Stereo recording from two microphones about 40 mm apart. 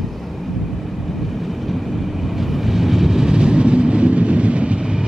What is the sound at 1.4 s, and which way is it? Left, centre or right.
Vehicle, centre.